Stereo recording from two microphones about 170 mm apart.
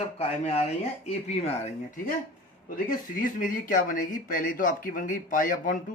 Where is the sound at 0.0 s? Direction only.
40° left (ahead or behind).